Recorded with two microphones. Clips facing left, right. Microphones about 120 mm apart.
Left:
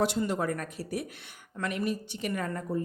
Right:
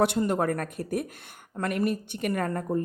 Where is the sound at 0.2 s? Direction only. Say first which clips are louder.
Right 4 dB; 50° right (ahead or behind).